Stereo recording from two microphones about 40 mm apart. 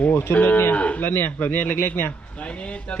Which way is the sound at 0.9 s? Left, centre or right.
Left.